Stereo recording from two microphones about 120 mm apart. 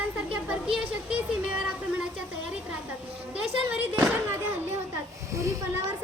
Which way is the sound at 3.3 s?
15° right (ahead or behind).